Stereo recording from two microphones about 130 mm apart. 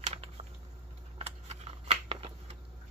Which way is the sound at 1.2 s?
55° right (ahead or behind).